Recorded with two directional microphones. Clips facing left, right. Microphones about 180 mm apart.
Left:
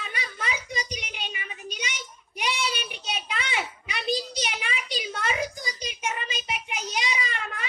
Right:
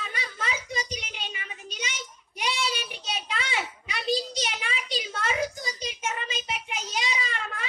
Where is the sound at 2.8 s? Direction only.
20° left (ahead or behind).